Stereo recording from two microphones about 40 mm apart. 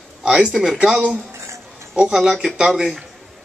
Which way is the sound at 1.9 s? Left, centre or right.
Right.